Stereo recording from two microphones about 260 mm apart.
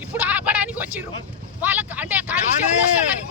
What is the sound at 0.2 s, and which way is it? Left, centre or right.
Vehicle, centre.